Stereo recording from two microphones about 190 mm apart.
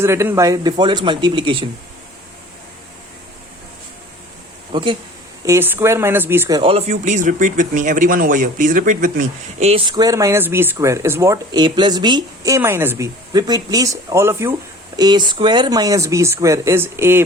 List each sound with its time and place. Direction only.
0.0 s speech: 15° right (ahead or behind)
4.7 s speech: 25° right (ahead or behind)
5.5 s speech: 10° right (ahead or behind)
6.6 s speech: 30° right (ahead or behind); by 17.2 s 10° right (ahead or behind)